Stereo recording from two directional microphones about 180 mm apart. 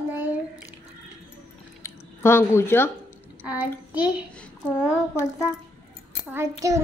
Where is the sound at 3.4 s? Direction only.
10° right (ahead or behind).